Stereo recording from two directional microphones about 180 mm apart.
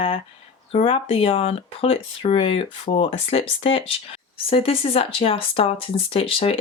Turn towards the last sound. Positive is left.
turn(degrees=30)  # may be behind; listen again after turning